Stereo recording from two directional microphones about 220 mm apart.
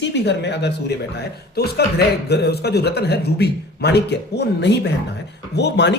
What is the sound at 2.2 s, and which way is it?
Speech, 50° left (ahead or behind).